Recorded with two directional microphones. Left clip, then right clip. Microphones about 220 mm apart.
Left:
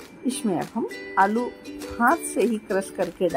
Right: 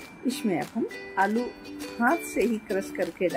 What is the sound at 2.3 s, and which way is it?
Speech, 15° left (ahead or behind).